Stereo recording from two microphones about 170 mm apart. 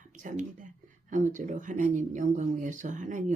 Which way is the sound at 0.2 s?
45° right (ahead or behind).